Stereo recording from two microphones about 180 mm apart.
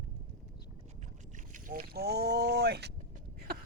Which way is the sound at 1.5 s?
45° right (ahead or behind).